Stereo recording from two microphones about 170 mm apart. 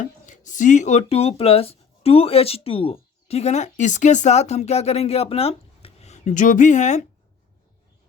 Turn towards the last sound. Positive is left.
turn(degrees=45)  # may be behind; listen again after turning